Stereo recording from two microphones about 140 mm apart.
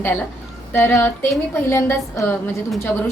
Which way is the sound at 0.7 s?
15° left (ahead or behind).